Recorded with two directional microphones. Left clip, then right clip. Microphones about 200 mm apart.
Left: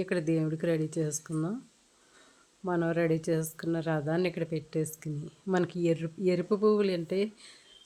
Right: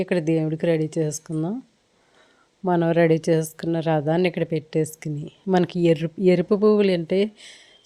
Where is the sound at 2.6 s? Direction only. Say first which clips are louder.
Right 10 dB; 30° right (ahead or behind).